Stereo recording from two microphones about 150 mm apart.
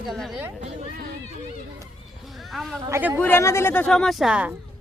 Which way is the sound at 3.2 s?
15° left (ahead or behind).